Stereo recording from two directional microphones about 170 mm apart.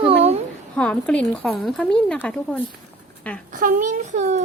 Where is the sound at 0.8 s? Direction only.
5° left (ahead or behind).